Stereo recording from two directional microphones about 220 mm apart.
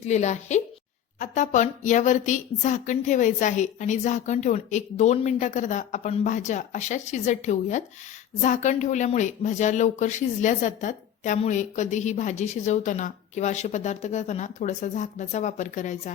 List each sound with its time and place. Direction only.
0.1 s speech: 30° left (ahead or behind)